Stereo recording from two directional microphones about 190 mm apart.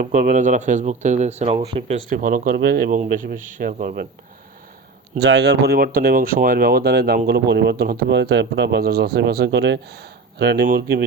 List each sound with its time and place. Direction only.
0.0 s speech: 45° right (ahead or behind)
1.5 s speech: 25° right (ahead or behind)
2.0 s speech: 45° right (ahead or behind)
5.1 s speech: 65° right (ahead or behind)